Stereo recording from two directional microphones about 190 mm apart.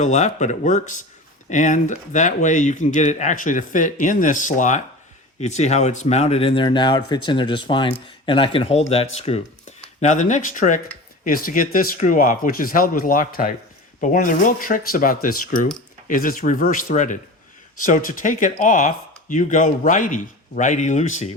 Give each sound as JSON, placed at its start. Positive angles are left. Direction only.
{"t": 0.0, "sound": "speech", "side_deg": 40}